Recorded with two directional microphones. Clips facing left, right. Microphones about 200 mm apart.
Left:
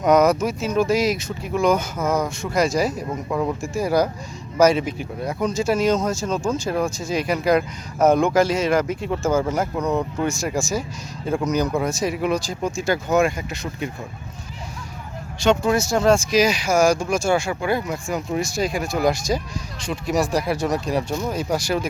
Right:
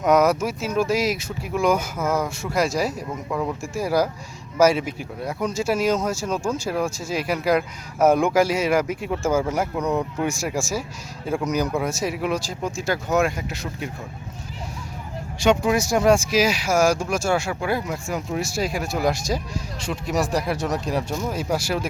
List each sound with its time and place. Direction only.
0.0 s speech: 5° right (ahead or behind)
15.4 s speech: 10° right (ahead or behind)